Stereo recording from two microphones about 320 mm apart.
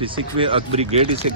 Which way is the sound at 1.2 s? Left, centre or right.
Right.